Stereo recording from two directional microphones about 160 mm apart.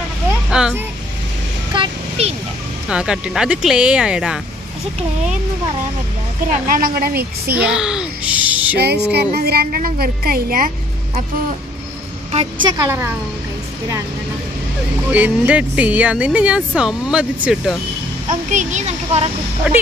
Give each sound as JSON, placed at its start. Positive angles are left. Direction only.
{"t": 0.5, "sound": "speech", "side_deg": -5}
{"t": 1.7, "sound": "vehicle", "side_deg": -35}
{"t": 2.9, "sound": "speech", "side_deg": -5}
{"t": 6.7, "sound": "a woman's voice", "side_deg": -65}
{"t": 7.5, "sound": "a child's voice", "side_deg": -5}
{"t": 8.7, "sound": "a woman's voice", "side_deg": -90}
{"t": 12.7, "sound": "speech", "side_deg": -15}
{"t": 15.1, "sound": "speech", "side_deg": -10}
{"t": 18.5, "sound": "speech", "side_deg": -50}
{"t": 19.7, "sound": "speech", "side_deg": -5}